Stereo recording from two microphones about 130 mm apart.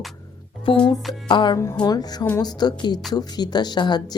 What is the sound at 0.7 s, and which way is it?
Music, 45° left (ahead or behind).